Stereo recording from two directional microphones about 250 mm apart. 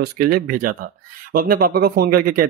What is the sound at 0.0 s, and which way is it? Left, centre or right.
Speech, right.